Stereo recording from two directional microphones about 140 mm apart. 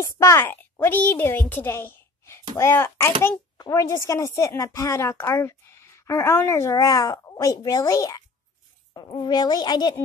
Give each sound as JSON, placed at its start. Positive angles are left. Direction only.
{"t": 0.0, "sound": "a woman's voice", "side_deg": 25}